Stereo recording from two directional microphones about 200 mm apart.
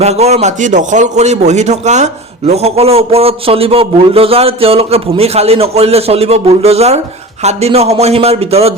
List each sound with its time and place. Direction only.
0.0 s a man's voice: 35° right (ahead or behind)